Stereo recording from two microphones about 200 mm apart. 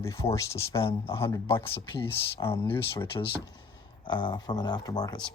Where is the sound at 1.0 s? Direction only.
30° left (ahead or behind).